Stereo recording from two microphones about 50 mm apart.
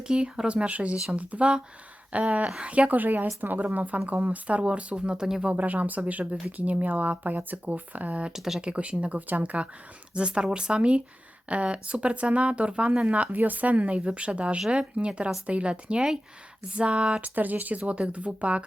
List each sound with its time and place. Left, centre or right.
0.1 s speech: centre
5.5 s speech: right
8.3 s speech: centre
8.6 s speech: right
13.3 s speech: right
17.2 s speech: right